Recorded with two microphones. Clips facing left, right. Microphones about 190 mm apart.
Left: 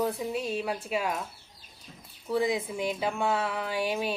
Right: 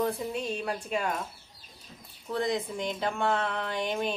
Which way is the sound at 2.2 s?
5° left (ahead or behind).